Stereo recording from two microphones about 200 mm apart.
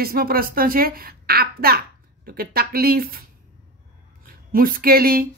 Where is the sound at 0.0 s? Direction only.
50° right (ahead or behind).